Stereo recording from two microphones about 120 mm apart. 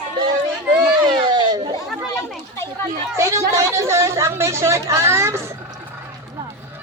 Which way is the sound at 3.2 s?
25° right (ahead or behind).